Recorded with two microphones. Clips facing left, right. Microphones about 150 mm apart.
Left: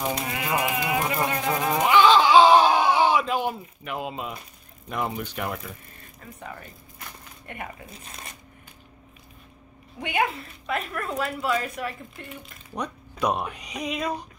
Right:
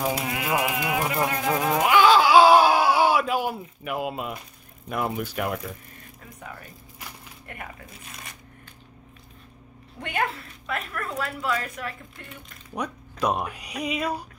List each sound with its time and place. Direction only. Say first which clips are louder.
0.0 s a sound: right 2 dB; 5° right (ahead or behind)
4.8 s speech: right 2 dB; 5° right (ahead or behind)
7.5 s speech: left 3 dB; centre (ahead or behind)
9.9 s speech: left 2 dB; 5° left (ahead or behind)
13.1 s speech: even; centre (ahead or behind)